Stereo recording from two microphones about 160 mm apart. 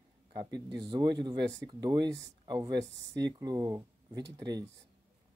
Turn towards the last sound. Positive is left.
turn(degrees=-25)  # may be behind; listen again after turning